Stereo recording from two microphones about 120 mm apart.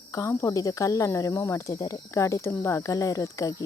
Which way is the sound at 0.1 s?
25° left (ahead or behind).